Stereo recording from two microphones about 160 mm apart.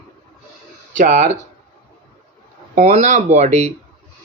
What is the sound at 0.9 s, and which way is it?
Speech, 45° right (ahead or behind).